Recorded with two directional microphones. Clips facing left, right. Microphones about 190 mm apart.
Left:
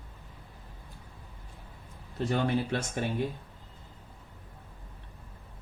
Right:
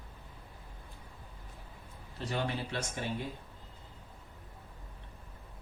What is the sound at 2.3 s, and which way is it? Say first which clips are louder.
Speech: left 6 dB; 50° left (ahead or behind).